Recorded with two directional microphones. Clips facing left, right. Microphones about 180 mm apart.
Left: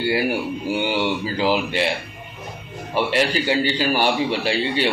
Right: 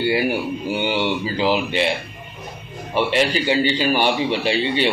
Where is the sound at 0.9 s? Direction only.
10° left (ahead or behind).